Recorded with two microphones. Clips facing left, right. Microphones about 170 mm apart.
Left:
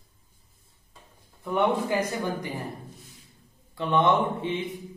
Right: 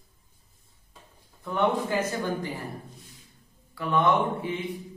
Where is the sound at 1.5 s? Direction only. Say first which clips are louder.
Left 1 dB; 15° left (ahead or behind).